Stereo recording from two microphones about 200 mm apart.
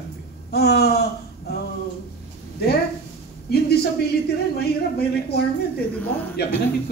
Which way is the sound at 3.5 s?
50° left (ahead or behind).